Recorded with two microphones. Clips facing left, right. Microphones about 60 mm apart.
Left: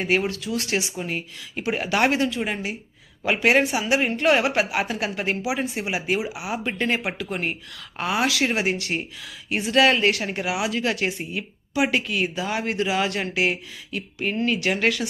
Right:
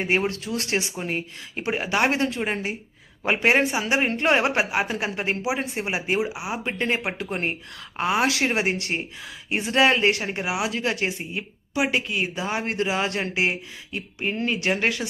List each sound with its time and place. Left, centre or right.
0.0 s speech: right
1.7 s speech: centre
2.0 s speech: right
7.2 s speech: right